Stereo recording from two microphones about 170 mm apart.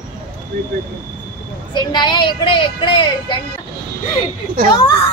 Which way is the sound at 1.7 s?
25° left (ahead or behind).